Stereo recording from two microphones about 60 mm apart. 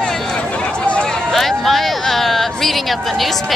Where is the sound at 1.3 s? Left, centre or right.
Centre.